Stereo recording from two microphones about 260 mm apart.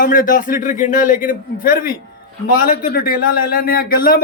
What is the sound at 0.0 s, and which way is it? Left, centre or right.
A man's voice, left.